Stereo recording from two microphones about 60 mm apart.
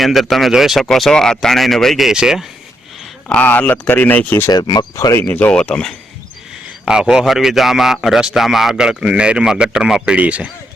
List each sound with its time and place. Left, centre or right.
0.0 s a man's voice: centre
2.0 s a man's voice: centre
3.2 s speech: left
4.4 s speech: left
5.5 s speech: centre
6.8 s a man's voice: centre